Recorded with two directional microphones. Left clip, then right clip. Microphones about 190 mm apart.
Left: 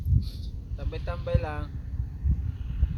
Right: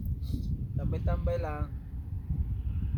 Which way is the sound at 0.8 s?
5° left (ahead or behind).